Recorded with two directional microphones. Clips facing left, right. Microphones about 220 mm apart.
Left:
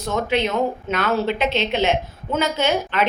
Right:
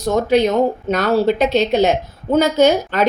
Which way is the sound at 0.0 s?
40° right (ahead or behind).